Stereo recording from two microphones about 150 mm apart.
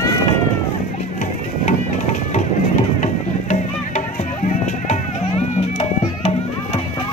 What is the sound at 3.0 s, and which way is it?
Music, 50° left (ahead or behind).